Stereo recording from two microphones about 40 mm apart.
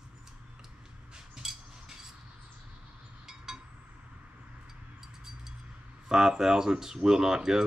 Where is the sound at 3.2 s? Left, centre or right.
Centre.